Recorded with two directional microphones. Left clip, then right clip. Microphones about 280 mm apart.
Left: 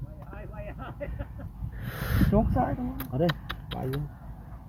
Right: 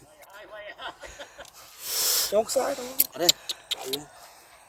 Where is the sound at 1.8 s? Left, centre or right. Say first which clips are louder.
Right 5 dB; centre.